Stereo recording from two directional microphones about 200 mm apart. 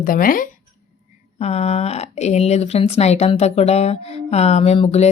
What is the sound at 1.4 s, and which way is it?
Speech, 30° left (ahead or behind).